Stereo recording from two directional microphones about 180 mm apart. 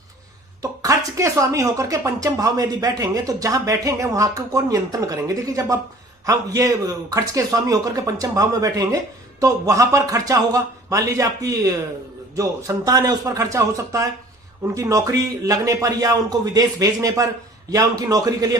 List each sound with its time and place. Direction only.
0.6 s speech: 20° right (ahead or behind)